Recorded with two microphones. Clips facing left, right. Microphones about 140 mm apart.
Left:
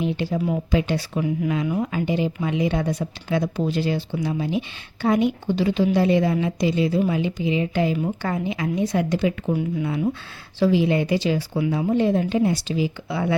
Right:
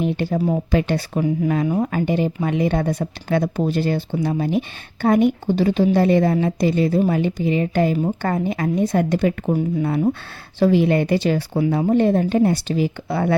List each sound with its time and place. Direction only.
0.0 s speech: 55° right (ahead or behind)
1.2 s speech: 40° right (ahead or behind)